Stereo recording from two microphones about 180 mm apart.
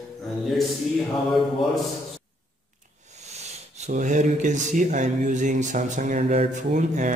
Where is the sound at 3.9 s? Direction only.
45° right (ahead or behind).